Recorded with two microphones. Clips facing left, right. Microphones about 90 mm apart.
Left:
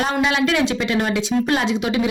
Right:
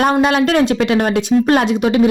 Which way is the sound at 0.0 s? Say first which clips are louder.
Right 6 dB; 50° right (ahead or behind).